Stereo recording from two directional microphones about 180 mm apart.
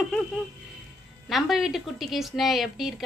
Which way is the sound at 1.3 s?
Centre (ahead or behind).